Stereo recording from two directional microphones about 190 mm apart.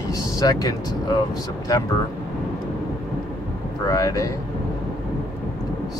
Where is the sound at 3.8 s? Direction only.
15° left (ahead or behind).